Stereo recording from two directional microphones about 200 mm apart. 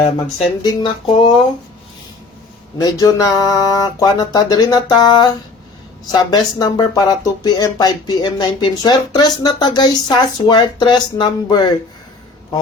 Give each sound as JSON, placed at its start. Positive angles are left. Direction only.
{"t": 0.6, "sound": "speech", "side_deg": 20}
{"t": 2.8, "sound": "speech", "side_deg": 20}